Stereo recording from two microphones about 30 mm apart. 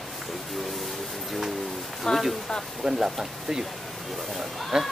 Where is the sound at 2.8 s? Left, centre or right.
Centre.